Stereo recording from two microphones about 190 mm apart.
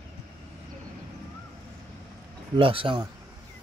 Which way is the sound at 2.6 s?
30° right (ahead or behind).